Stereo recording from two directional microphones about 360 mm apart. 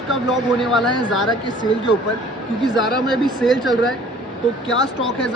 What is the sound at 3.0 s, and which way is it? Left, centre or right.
Speech, centre.